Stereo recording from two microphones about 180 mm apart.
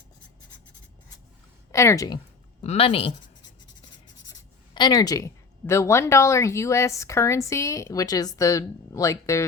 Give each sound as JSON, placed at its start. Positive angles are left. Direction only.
{"t": 1.7, "sound": "speech", "side_deg": 15}
{"t": 2.6, "sound": "speech", "side_deg": 35}
{"t": 4.3, "sound": "speech", "side_deg": 20}